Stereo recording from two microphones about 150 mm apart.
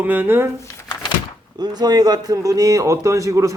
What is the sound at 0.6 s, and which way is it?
Crumpling, 25° left (ahead or behind).